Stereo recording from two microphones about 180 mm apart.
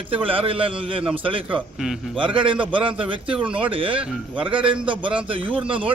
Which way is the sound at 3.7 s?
30° right (ahead or behind).